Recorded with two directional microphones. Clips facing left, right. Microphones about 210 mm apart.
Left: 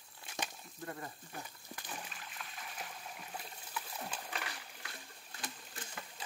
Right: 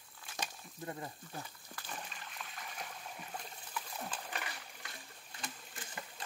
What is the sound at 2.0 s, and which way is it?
Trickle, 5° left (ahead or behind).